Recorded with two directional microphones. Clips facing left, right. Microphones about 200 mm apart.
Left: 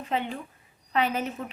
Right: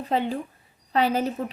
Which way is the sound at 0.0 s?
35° right (ahead or behind).